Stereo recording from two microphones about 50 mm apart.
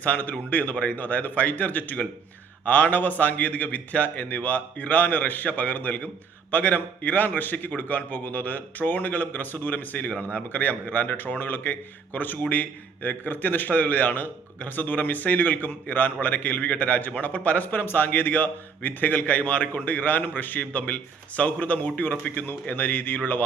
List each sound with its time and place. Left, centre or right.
0.0 s a man's voice: left